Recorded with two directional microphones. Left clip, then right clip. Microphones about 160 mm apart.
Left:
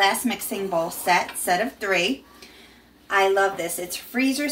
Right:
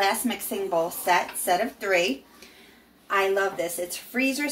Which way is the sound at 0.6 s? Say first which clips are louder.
Left 2 dB; 10° right (ahead or behind).